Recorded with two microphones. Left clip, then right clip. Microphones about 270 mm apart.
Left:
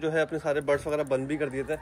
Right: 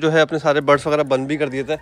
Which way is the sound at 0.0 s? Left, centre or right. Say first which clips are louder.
Right 11 dB; right.